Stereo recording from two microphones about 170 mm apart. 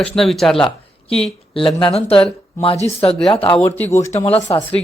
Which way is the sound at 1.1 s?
35° left (ahead or behind).